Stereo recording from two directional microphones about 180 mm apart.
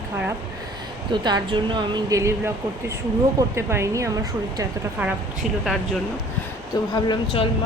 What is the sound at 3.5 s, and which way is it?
Speech, 15° right (ahead or behind).